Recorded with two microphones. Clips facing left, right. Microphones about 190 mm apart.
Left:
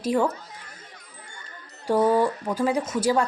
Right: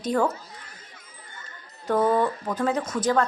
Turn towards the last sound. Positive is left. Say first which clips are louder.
# left 1 dB
turn(degrees=10)  # may be behind; listen again after turning